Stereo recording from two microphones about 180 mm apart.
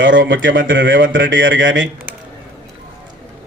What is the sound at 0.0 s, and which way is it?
Speech, 90° right.